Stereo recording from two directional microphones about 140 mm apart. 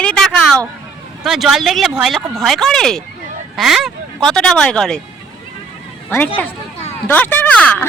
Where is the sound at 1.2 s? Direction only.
Centre (ahead or behind).